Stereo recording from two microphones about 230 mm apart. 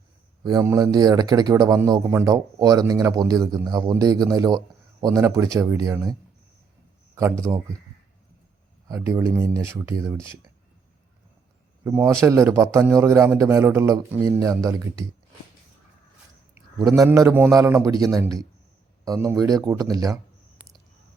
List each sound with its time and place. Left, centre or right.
0.4 s speech: centre
7.2 s speech: centre
8.9 s speech: centre
11.9 s speech: centre
16.7 s speech: centre